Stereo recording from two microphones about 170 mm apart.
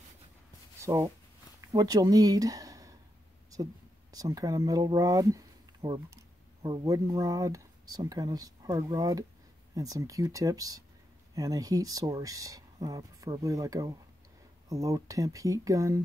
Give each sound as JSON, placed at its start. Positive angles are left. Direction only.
{"t": 0.7, "sound": "speech", "side_deg": -15}
{"t": 4.1, "sound": "speech", "side_deg": -20}